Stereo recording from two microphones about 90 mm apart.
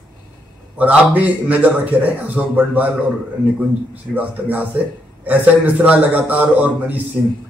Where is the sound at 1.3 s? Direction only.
15° right (ahead or behind).